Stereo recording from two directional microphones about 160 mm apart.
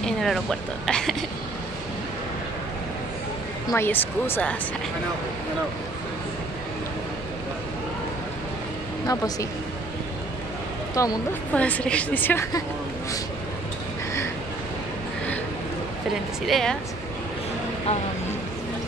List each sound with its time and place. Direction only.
0.0 s speech: centre (ahead or behind)
3.6 s a woman's voice: 15° left (ahead or behind)
9.0 s speech: 20° left (ahead or behind)
11.0 s speech: 20° left (ahead or behind)
11.5 s a woman's voice: 10° left (ahead or behind)
16.4 s a woman's voice: centre (ahead or behind)